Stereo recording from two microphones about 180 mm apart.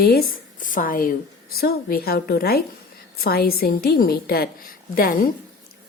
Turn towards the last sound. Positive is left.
turn(degrees=50)  # may be behind; listen again after turning